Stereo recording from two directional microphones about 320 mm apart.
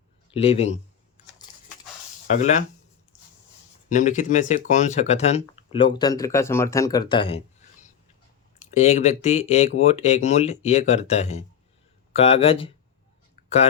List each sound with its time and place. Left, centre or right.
0.3 s speech: centre
2.3 s speech: left
3.8 s speech: left